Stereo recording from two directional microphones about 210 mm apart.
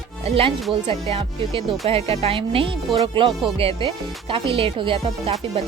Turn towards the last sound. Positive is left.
turn(degrees=-30)  # may be behind; listen again after turning